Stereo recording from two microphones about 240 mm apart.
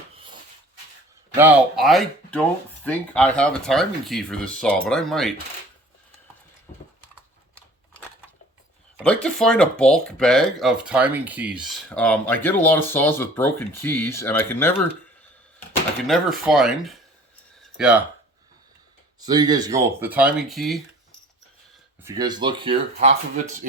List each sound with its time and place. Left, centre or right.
1.4 s speech: centre
9.0 s speech: centre
16.0 s speech: centre
19.2 s speech: centre
22.0 s speech: centre